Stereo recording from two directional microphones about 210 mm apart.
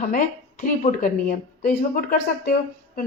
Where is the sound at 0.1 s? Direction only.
40° left (ahead or behind).